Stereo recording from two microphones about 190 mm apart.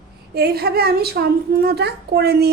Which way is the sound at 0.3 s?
55° right (ahead or behind).